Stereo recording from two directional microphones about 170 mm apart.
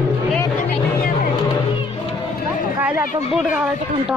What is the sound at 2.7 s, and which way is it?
Speech, 10° right (ahead or behind).